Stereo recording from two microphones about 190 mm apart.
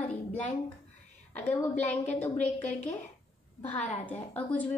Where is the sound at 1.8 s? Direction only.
40° left (ahead or behind).